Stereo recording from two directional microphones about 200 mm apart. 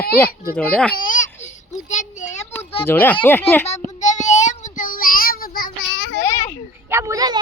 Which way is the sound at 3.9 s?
35° left (ahead or behind).